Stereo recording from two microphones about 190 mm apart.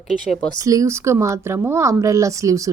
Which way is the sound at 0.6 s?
20° right (ahead or behind).